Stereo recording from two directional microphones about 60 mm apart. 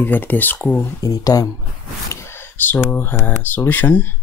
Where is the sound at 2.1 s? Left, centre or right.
Left.